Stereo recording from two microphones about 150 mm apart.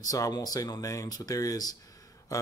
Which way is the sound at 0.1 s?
25° left (ahead or behind).